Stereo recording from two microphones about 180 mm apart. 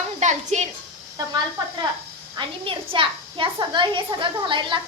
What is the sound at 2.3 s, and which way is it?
A woman's voice, 30° right (ahead or behind).